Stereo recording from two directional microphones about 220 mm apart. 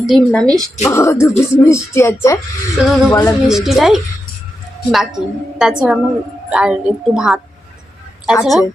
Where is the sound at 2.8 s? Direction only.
5° right (ahead or behind).